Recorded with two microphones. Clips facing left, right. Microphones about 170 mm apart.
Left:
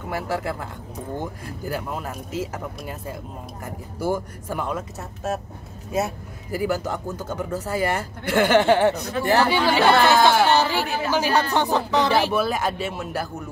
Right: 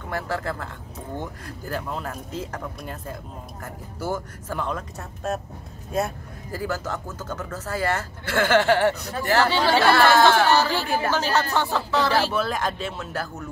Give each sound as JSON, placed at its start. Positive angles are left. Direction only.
{"t": 0.1, "sound": "speech", "side_deg": 10}
{"t": 6.6, "sound": "speech", "side_deg": 15}